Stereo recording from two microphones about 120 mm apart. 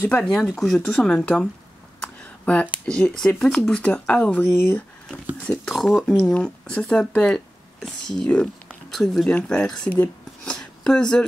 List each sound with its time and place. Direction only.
0.0 s speech: 5° left (ahead or behind)
2.0 s a sound: 10° left (ahead or behind)
2.9 s speech: 5° left (ahead or behind)
5.7 s speech: centre (ahead or behind)